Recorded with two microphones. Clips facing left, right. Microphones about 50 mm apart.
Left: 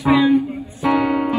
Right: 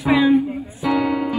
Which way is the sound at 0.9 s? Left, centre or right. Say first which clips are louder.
Left 2 dB; left.